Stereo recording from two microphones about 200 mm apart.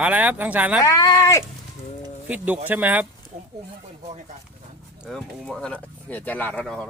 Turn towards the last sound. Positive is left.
turn(degrees=5)  # may be behind; listen again after turning